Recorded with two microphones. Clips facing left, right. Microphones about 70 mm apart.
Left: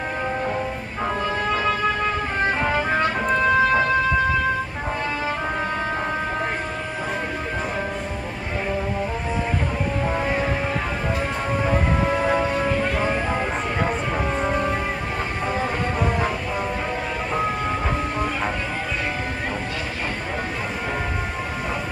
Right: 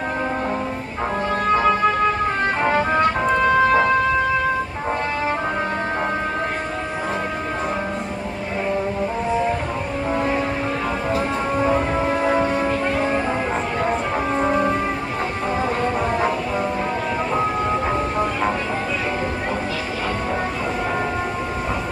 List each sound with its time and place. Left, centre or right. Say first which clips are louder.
3.2 s music: right 2 dB; centre
10.0 s music: right 4 dB; centre
12.0 s music: right 1 dB; centre
14.1 s music: right 3 dB; centre